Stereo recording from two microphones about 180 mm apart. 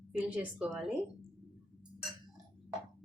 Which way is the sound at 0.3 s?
5° right (ahead or behind).